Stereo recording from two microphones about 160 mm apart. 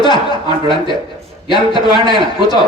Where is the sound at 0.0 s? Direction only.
30° left (ahead or behind).